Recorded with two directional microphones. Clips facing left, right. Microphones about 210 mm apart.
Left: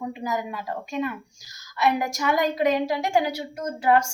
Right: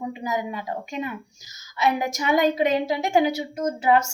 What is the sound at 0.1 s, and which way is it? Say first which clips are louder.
A woman's voice: right 1 dB; 20° right (ahead or behind).